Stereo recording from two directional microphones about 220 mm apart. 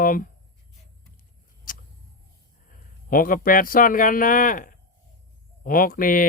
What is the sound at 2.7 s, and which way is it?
A man's voice, 40° left (ahead or behind).